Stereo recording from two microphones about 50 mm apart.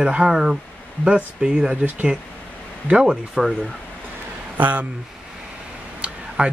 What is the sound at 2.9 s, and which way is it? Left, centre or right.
Speech, centre.